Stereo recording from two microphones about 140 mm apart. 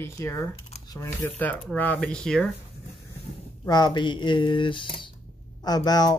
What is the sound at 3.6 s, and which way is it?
Speech, 30° left (ahead or behind).